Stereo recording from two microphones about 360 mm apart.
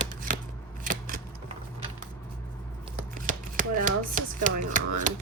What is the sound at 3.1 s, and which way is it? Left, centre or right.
Speech, right.